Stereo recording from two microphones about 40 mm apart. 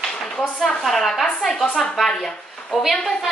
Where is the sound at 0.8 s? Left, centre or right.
Centre.